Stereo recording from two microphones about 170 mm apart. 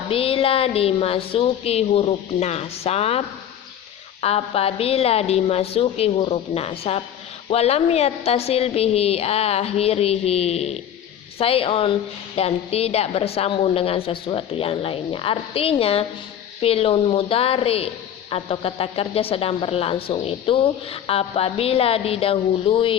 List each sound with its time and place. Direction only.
0.1 s a woman's voice: 35° left (ahead or behind)